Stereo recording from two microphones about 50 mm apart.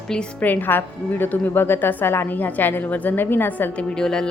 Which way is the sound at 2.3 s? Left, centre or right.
Left.